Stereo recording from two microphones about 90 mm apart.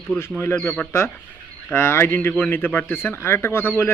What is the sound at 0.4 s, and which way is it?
Speech, 30° left (ahead or behind).